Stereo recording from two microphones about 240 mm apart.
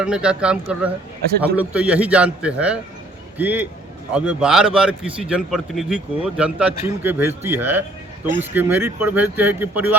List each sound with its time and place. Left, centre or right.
0.0 s a man's voice: centre